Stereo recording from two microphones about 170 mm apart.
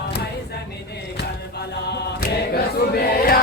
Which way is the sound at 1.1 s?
80° left.